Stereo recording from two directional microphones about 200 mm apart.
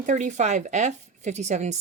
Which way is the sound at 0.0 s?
40° right (ahead or behind).